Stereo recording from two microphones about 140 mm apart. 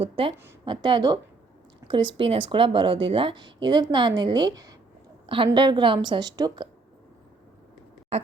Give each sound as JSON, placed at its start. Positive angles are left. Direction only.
{"t": 0.0, "sound": "speech", "side_deg": -40}
{"t": 5.2, "sound": "speech", "side_deg": -40}